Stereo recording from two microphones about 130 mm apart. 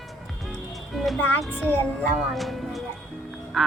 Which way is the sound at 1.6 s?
15° left (ahead or behind).